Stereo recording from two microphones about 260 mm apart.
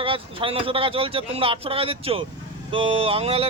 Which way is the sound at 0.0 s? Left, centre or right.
Centre.